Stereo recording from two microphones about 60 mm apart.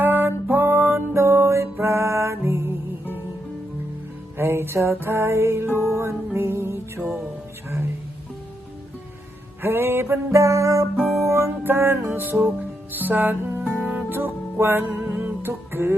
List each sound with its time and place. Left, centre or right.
0.0 s music: right
4.4 s music: right
9.6 s music: right
10.9 s music: centre
11.2 s music: right
11.6 s music: right